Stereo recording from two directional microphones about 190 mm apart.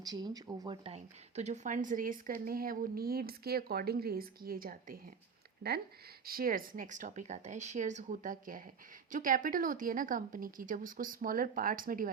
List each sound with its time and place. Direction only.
0.0 s speech: 20° right (ahead or behind)
0.9 s speech: 35° right (ahead or behind)